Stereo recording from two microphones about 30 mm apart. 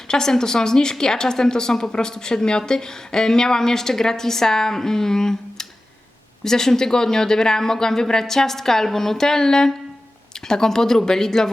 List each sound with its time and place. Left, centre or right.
0.1 s a woman's voice: centre